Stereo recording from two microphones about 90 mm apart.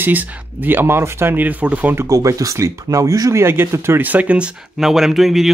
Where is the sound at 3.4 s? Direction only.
30° right (ahead or behind); by 5.5 s 5° right (ahead or behind).